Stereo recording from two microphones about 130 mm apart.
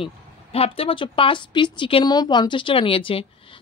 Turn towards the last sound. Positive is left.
turn(degrees=40)  # may be behind; listen again after turning